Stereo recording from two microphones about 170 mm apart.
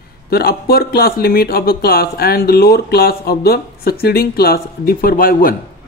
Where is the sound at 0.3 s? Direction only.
65° left (ahead or behind).